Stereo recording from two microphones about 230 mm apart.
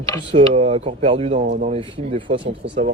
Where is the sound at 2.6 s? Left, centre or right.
Right.